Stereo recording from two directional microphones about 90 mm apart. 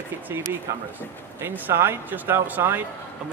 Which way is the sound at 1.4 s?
25° right (ahead or behind).